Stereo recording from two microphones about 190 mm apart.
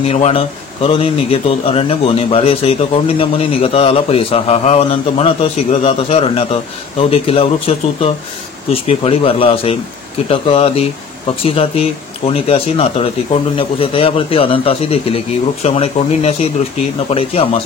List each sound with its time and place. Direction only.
0.0 s a man's voice: 30° left (ahead or behind)